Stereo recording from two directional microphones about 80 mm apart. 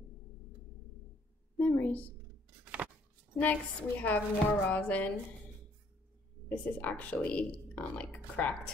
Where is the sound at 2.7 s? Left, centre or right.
Right.